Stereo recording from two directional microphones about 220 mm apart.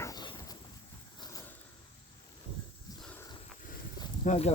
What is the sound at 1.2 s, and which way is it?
Vehicle, 15° left (ahead or behind).